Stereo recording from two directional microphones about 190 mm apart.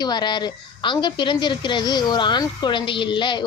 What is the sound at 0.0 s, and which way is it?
A woman's voice, 25° left (ahead or behind).